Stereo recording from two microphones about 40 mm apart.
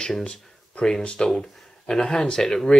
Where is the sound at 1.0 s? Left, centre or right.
Centre.